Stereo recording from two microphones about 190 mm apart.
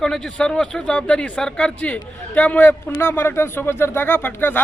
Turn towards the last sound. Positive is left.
turn(degrees=10)  # may be behind; listen again after turning